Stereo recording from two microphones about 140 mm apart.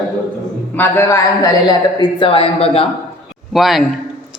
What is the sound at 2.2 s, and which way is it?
Speech, 40° left (ahead or behind).